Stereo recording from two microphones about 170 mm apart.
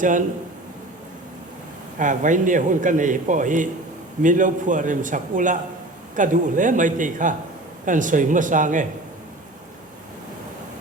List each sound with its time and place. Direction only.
0.0 s a man's voice: 50° right (ahead or behind)
2.0 s a man's voice: 50° right (ahead or behind)